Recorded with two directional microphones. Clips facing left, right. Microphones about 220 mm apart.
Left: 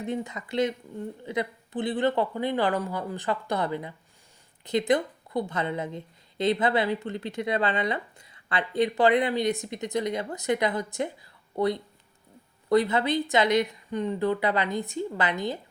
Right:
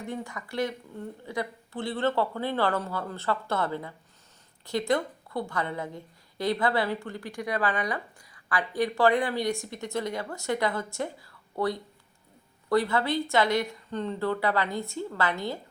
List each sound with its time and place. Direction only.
0.0 s a woman's voice: 20° left (ahead or behind)